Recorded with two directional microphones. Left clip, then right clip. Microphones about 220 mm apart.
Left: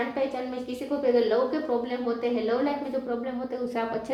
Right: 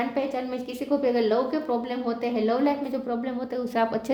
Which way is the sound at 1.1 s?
40° right (ahead or behind).